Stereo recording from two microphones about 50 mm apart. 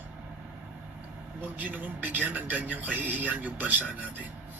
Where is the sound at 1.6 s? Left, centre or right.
Right.